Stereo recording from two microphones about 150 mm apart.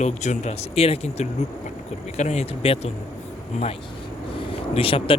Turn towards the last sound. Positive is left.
turn(degrees=40)  # may be behind; listen again after turning